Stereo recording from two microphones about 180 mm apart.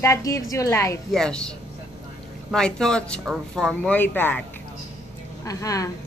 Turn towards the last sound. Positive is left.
turn(degrees=20)  # may be behind; listen again after turning